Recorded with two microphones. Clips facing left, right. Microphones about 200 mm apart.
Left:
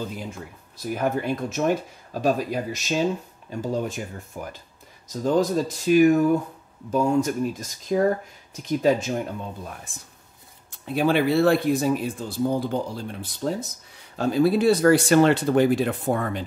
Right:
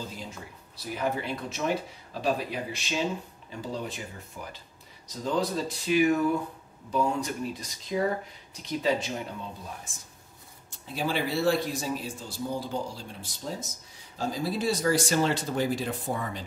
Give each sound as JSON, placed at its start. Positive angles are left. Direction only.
{"t": 0.7, "sound": "speech", "side_deg": 50}